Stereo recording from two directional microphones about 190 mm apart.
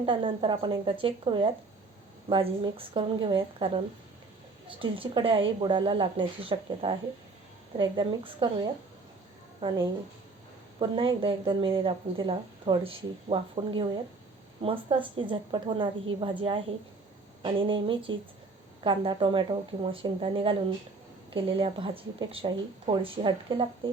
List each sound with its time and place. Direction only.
0.0 s speech: 25° right (ahead or behind)
4.7 s speech: 25° right (ahead or behind)
9.6 s speech: 25° right (ahead or behind)